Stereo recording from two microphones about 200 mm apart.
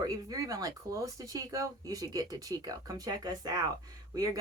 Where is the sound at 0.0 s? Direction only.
20° right (ahead or behind).